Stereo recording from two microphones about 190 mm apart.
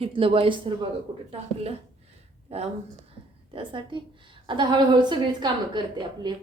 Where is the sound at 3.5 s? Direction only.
25° right (ahead or behind).